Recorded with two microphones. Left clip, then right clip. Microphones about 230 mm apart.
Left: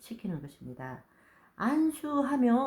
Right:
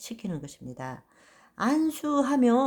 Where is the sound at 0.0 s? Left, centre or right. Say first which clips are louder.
Right 4 dB; right.